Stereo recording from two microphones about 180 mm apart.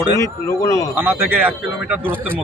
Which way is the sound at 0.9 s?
10° right (ahead or behind).